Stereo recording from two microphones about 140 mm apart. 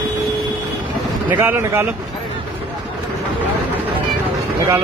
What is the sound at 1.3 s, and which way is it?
Speech, 15° right (ahead or behind).